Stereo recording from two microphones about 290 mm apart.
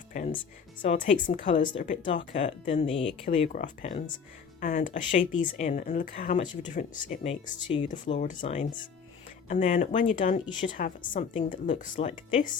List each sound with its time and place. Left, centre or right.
0.8 s speech: left